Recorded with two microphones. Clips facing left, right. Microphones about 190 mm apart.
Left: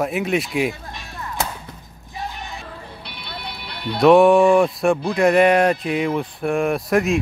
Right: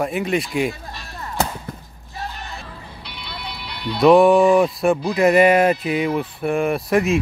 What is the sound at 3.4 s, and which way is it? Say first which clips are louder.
Music: right 1 dB; 55° left (ahead or behind).